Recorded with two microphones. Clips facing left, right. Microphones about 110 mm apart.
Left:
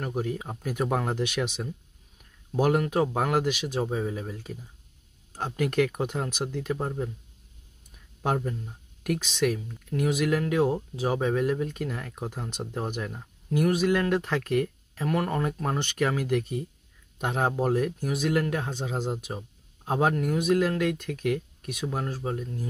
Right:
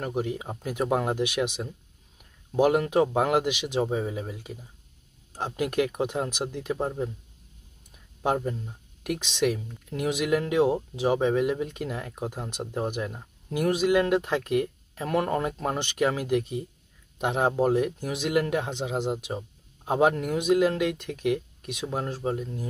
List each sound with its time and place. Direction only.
0.0 s speech: 15° right (ahead or behind)
8.2 s speech: 15° right (ahead or behind)
9.8 s speech: 20° right (ahead or behind)